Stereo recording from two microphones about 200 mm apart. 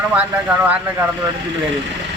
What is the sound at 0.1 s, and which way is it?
Speech, 5° right (ahead or behind).